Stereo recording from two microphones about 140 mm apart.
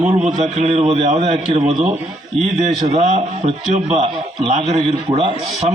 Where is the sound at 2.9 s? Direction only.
55° right (ahead or behind).